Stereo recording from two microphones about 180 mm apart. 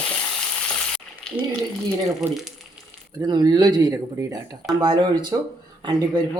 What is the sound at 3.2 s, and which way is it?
Speech, 25° right (ahead or behind).